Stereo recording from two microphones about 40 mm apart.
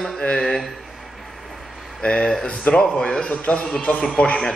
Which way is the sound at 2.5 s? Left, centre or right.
Left.